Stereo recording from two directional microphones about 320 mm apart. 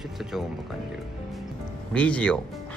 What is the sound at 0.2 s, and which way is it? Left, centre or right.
Speech, centre.